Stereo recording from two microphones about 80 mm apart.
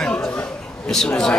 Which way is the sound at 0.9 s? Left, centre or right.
Centre.